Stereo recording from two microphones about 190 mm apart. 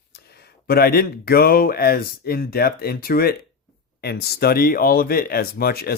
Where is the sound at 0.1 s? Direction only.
55° left (ahead or behind).